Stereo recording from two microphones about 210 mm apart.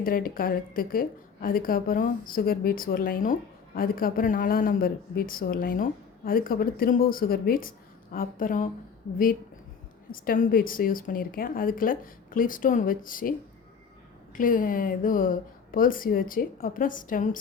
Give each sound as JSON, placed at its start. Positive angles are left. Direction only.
{"t": 0.0, "sound": "a woman's voice", "side_deg": 40}
{"t": 10.1, "sound": "a woman's voice", "side_deg": 40}
{"t": 14.3, "sound": "a woman's voice", "side_deg": 40}